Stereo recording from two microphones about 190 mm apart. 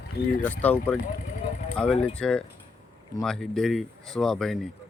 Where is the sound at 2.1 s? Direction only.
5° left (ahead or behind).